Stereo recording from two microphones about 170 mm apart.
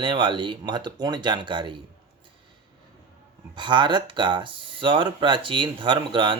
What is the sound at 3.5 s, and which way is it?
Speech, 25° right (ahead or behind).